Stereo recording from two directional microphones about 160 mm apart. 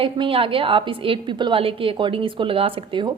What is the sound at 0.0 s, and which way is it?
A woman's voice, 35° right (ahead or behind).